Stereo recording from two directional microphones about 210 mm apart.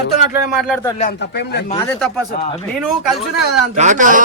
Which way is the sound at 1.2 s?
50° left (ahead or behind).